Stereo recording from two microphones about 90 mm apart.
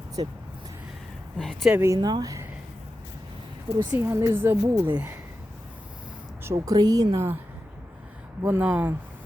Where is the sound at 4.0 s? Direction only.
30° right (ahead or behind).